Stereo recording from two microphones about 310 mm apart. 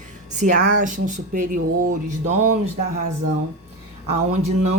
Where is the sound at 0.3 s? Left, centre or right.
Right.